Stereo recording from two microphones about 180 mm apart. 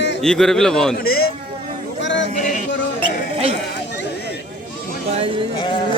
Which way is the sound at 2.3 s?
45° left (ahead or behind).